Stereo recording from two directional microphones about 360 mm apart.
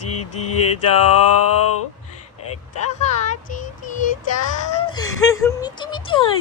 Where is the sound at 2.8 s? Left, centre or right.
Centre.